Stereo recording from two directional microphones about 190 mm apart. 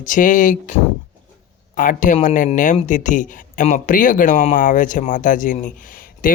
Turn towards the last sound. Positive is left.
turn(degrees=45)  # may be behind; listen again after turning